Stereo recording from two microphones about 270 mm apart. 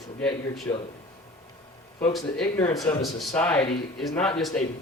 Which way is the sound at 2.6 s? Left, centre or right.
Centre.